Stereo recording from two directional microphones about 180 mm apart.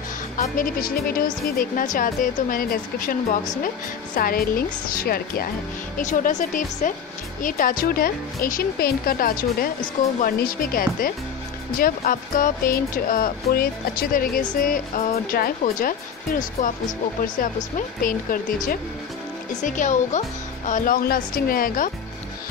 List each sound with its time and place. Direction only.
0.4 s speech: 50° left (ahead or behind)
5.9 s speech: 45° left (ahead or behind)